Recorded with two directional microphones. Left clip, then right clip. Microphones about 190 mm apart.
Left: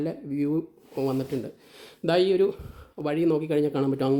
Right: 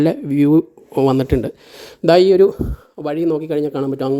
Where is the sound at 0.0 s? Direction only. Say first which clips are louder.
Right 13 dB; 50° right (ahead or behind).